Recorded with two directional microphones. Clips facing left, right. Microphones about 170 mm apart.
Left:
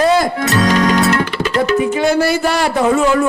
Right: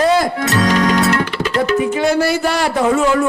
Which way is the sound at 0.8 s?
20° left (ahead or behind).